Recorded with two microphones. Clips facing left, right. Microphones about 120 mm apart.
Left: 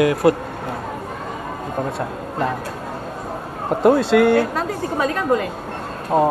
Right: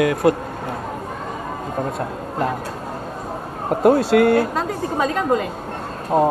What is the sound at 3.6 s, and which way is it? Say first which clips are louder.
Speech: even; centre (ahead or behind).